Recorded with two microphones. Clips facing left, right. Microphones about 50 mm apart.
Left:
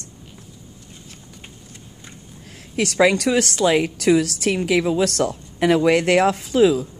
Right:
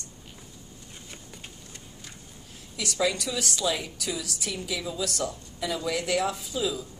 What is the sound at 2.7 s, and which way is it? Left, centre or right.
A woman's voice, left.